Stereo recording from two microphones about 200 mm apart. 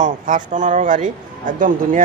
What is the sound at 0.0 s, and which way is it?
Speech, 40° right (ahead or behind).